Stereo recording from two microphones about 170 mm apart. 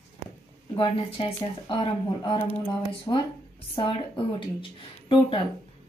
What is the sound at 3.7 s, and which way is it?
Speech, 30° left (ahead or behind).